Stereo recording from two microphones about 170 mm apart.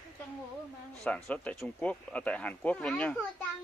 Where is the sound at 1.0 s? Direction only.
5° left (ahead or behind).